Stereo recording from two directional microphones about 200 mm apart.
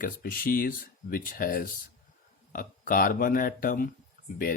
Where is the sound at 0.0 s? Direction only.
50° left (ahead or behind).